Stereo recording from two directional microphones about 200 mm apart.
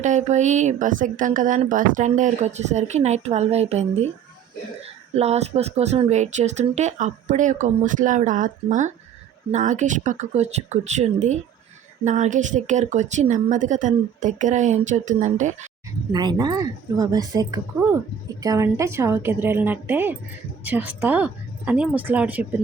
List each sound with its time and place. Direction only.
0.0 s speech: 35° right (ahead or behind)
5.1 s speech: 30° right (ahead or behind)
16.1 s a woman's voice: 20° right (ahead or behind)